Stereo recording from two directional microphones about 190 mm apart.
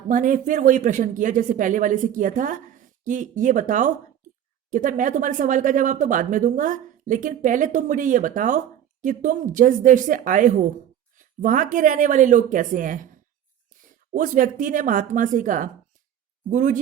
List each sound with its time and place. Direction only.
0.1 s speech: 45° right (ahead or behind)
14.1 s speech: 45° right (ahead or behind)